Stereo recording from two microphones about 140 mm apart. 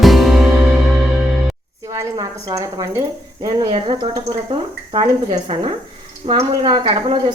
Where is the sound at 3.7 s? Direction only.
35° right (ahead or behind).